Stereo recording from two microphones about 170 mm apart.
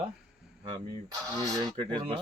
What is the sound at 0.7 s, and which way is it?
Speech, 25° right (ahead or behind).